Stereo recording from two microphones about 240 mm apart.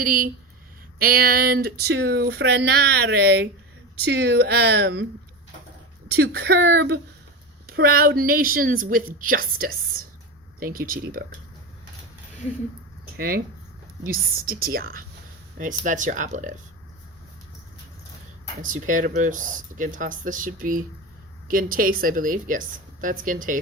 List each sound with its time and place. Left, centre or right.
0.0 s speech: right
6.1 s speech: right
13.1 s speech: right
18.6 s speech: right